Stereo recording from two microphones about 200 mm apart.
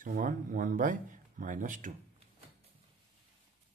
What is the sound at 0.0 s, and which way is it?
Speech, 40° right (ahead or behind).